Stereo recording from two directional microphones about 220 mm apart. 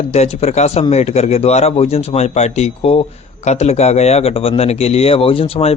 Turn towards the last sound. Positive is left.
turn(degrees=25)  # may be behind; listen again after turning